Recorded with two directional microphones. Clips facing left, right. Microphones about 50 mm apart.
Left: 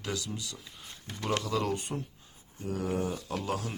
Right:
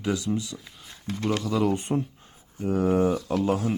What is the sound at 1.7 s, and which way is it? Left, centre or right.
Speech, right.